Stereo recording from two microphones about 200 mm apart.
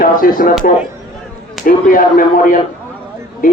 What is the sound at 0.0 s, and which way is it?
Speech, 45° left (ahead or behind).